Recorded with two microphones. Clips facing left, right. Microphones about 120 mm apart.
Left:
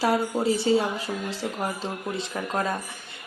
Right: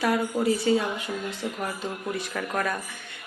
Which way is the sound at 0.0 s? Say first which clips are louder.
Left 1 dB; 30° left (ahead or behind).